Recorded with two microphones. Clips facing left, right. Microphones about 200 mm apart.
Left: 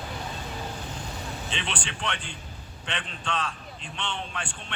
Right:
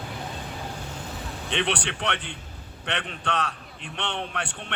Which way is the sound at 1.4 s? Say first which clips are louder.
Right 10 dB; 60° right (ahead or behind).